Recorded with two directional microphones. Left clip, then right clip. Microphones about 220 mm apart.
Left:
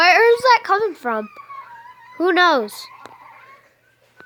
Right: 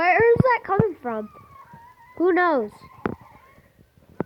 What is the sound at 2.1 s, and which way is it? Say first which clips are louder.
Speech: left 4 dB; 30° left (ahead or behind).